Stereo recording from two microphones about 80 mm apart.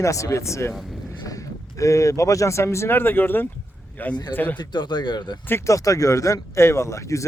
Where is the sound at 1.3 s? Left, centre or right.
Left.